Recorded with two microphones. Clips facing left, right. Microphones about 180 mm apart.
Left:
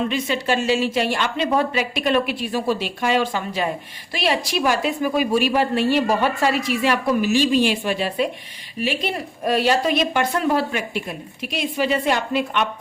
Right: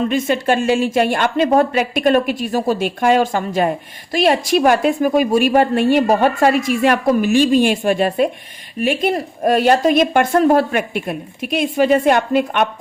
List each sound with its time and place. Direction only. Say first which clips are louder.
0.1 s a woman's voice: right 5 dB; 50° right (ahead or behind)